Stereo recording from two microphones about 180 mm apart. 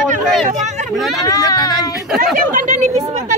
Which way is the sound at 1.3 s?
20° left (ahead or behind).